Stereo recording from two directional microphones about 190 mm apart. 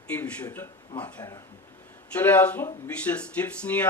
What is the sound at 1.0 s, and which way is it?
Speech, 10° left (ahead or behind).